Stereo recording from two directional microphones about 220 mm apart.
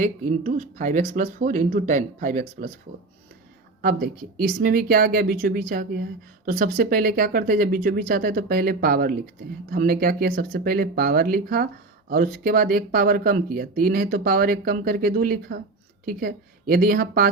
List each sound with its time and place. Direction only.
0.0 s speech: 35° right (ahead or behind)
3.8 s speech: 40° right (ahead or behind)